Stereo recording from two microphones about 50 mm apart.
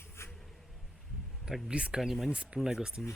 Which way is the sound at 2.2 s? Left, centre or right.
Centre.